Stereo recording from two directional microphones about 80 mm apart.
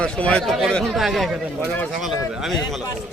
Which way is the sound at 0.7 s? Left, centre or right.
Centre.